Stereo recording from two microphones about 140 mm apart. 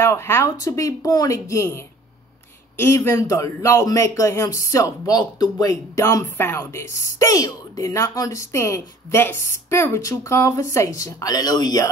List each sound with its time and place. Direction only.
0.0 s speech: 20° left (ahead or behind)